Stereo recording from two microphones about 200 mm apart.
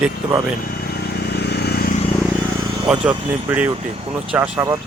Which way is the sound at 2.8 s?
5° right (ahead or behind).